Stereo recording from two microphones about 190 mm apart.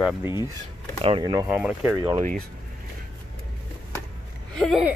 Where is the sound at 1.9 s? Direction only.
20° right (ahead or behind).